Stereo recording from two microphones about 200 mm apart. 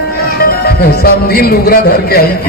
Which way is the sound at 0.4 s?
50° left (ahead or behind).